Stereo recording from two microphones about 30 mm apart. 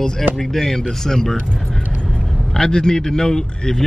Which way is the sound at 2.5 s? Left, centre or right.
Left.